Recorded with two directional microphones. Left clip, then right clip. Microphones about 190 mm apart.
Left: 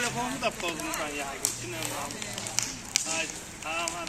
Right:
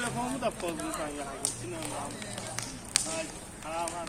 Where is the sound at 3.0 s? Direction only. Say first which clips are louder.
Left 1 dB; 5° right (ahead or behind).